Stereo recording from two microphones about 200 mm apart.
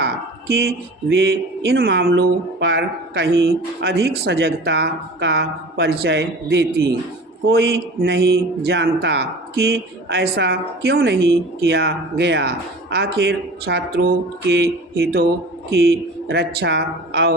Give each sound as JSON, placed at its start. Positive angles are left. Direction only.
{"t": 0.0, "sound": "a sound", "side_deg": -55}
{"t": 1.1, "sound": "speech", "side_deg": -55}
{"t": 8.0, "sound": "speech", "side_deg": -55}
{"t": 16.3, "sound": "speech", "side_deg": -55}